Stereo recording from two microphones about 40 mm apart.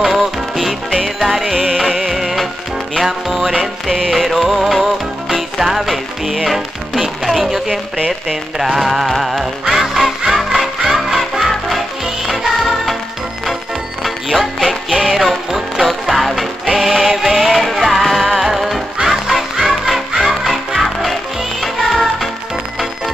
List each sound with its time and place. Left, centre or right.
0.0 s music: centre
0.8 s music: centre
1.2 s music: centre
8.1 s speech: centre
9.2 s music: centre
14.0 s music: centre